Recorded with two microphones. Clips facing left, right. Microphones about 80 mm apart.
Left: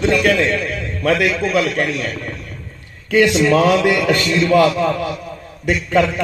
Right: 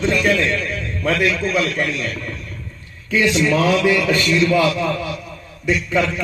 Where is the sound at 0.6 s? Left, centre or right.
Left.